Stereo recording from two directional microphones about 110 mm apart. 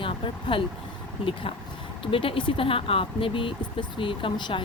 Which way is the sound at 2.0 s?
55° left (ahead or behind).